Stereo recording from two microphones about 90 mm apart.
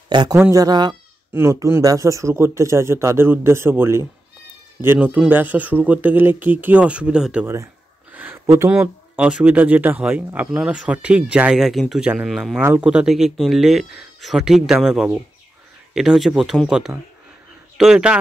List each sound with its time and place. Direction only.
0.1 s speech: 55° right (ahead or behind)
0.5 s speech: 45° right (ahead or behind)
1.3 s speech: 30° right (ahead or behind); by 7.4 s 10° right (ahead or behind)
7.4 s speech: 35° right (ahead or behind)
8.1 s a sound: 20° right (ahead or behind)
8.6 s speech: 15° right (ahead or behind)
12.3 s speech: centre (ahead or behind)
12.7 s speech: 10° right (ahead or behind)